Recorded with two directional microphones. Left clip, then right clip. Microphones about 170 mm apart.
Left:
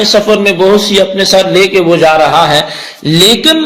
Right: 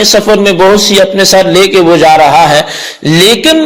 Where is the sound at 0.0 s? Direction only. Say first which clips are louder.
Right 2 dB; 50° right (ahead or behind).